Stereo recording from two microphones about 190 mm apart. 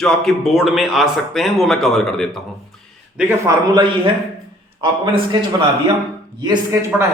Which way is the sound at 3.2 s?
10° right (ahead or behind).